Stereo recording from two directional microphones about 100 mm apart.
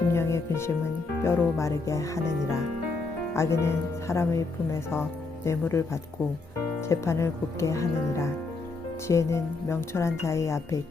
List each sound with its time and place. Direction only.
0.1 s music: 30° left (ahead or behind)
1.2 s speech: 25° left (ahead or behind)
3.3 s speech: 30° left (ahead or behind)